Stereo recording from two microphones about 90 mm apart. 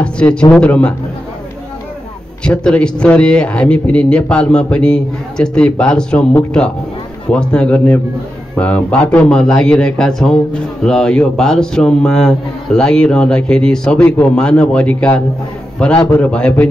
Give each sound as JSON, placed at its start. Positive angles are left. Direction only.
{"t": 0.0, "sound": "a man's voice", "side_deg": 10}
{"t": 2.4, "sound": "a man's voice", "side_deg": 15}
{"t": 7.2, "sound": "a man's voice", "side_deg": 15}